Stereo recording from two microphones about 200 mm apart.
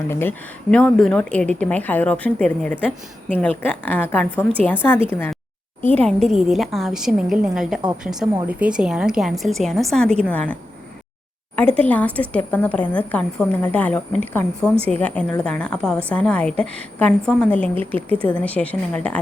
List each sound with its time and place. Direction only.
0.1 s a woman's voice: 10° left (ahead or behind)
5.8 s a woman's voice: 5° left (ahead or behind)
11.8 s a woman's voice: 10° left (ahead or behind)